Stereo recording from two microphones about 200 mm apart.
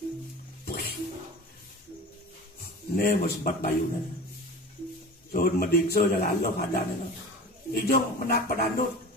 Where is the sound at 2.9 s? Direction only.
45° left (ahead or behind).